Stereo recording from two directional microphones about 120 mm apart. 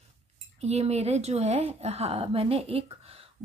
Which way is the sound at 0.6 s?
60° right (ahead or behind).